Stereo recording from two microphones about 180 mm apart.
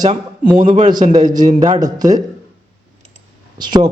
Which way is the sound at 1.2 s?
45° right (ahead or behind).